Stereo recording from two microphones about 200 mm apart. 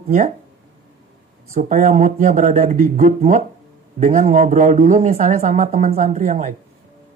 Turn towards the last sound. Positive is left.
turn(degrees=-35)  # may be behind; listen again after turning